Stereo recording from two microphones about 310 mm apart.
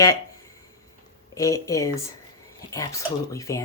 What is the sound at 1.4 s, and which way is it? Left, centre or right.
Speech, centre.